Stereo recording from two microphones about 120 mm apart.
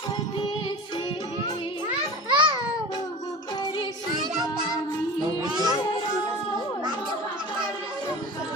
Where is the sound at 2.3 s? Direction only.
45° right (ahead or behind).